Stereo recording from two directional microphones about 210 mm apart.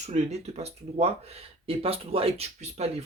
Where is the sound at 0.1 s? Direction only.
30° right (ahead or behind).